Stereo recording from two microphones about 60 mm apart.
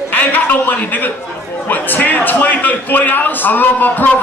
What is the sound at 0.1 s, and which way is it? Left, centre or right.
A man's voice, left.